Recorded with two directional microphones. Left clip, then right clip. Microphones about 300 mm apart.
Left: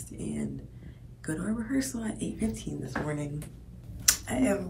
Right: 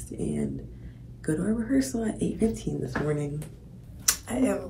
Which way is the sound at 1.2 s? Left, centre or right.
Centre.